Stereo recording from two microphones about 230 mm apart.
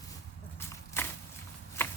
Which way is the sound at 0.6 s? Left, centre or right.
Centre.